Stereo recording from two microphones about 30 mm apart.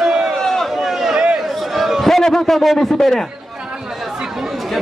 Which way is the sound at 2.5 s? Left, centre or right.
Centre.